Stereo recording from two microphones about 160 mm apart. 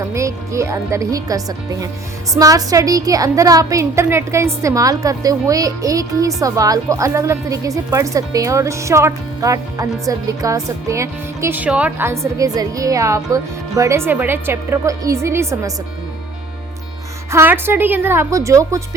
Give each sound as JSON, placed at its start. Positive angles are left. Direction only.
{"t": 0.1, "sound": "a woman's voice", "side_deg": -20}
{"t": 17.3, "sound": "a woman's voice", "side_deg": -15}